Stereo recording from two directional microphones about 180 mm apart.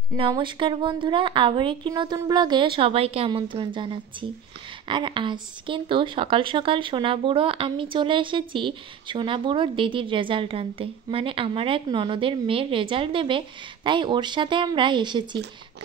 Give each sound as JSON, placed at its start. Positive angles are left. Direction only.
{"t": 0.1, "sound": "a woman's voice", "side_deg": -25}